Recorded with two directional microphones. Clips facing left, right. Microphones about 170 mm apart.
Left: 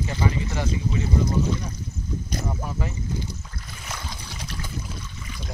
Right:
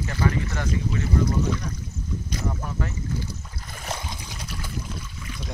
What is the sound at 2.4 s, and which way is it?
Speech, 10° left (ahead or behind).